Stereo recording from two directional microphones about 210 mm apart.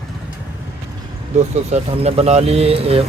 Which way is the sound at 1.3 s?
30° right (ahead or behind).